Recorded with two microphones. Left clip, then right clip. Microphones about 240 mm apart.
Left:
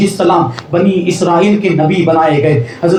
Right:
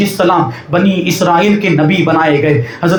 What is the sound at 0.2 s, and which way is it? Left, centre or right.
A man's voice, right.